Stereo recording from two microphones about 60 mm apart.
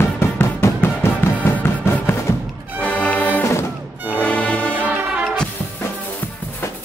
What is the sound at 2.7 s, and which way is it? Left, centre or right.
Music, left.